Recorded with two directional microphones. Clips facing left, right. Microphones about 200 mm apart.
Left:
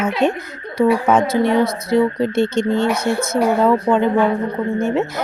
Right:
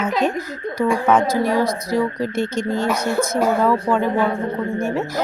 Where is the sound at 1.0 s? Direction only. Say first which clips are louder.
Left 2 dB; 25° left (ahead or behind).